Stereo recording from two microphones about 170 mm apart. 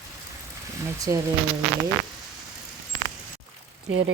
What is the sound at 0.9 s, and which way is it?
Speech, 20° right (ahead or behind).